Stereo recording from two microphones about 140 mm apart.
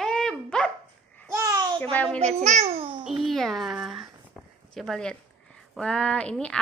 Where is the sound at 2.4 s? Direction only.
55° right (ahead or behind).